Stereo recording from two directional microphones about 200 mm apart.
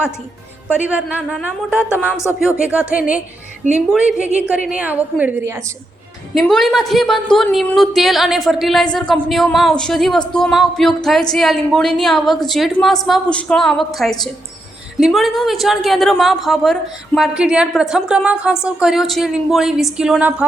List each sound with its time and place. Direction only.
0.7 s a woman's voice: 5° right (ahead or behind)
1.9 s speech: 15° left (ahead or behind)
2.4 s a woman's voice: 5° right (ahead or behind)
3.6 s a woman's voice: 35° right (ahead or behind)
3.9 s a woman's voice: 5° right (ahead or behind)
6.3 s a woman's voice: centre (ahead or behind)